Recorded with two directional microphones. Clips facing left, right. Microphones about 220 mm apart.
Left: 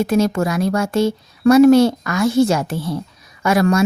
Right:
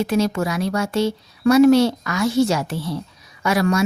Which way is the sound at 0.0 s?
50° left (ahead or behind).